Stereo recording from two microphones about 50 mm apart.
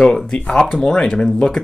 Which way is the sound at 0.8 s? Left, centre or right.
Centre.